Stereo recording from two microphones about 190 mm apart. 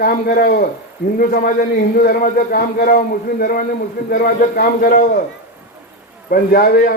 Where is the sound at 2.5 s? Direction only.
50° left (ahead or behind).